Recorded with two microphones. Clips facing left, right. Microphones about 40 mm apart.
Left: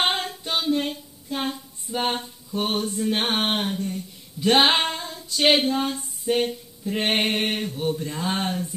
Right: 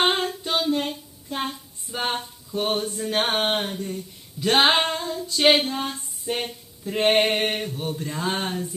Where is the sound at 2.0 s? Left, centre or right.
Centre.